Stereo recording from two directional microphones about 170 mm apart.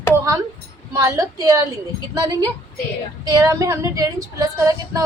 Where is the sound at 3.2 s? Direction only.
20° right (ahead or behind).